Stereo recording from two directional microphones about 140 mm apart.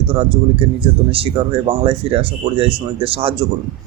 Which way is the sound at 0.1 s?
40° right (ahead or behind).